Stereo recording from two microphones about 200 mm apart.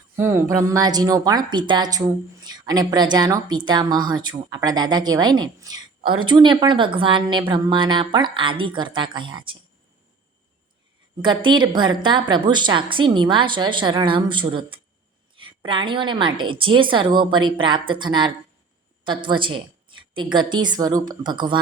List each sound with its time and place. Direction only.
0.2 s a woman's voice: 15° right (ahead or behind)
11.2 s a woman's voice: 25° right (ahead or behind)